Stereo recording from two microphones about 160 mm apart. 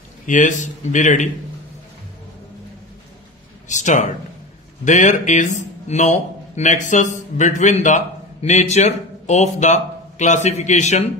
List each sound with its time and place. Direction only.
0.3 s speech: 50° left (ahead or behind)
3.6 s speech: 50° left (ahead or behind)